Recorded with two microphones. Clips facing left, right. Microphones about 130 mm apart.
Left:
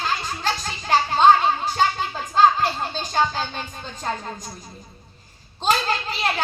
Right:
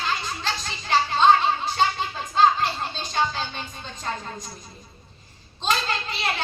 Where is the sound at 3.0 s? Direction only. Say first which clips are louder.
Left 3 dB; 40° left (ahead or behind).